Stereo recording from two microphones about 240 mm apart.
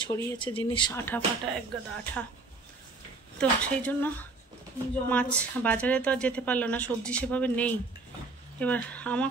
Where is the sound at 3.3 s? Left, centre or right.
Centre.